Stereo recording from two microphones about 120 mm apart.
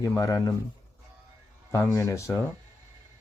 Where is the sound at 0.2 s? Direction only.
30° left (ahead or behind).